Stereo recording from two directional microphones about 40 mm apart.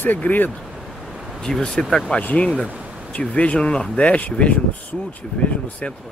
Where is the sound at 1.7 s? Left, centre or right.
Centre.